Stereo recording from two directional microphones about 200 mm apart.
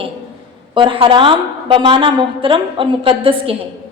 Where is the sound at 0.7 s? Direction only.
25° right (ahead or behind).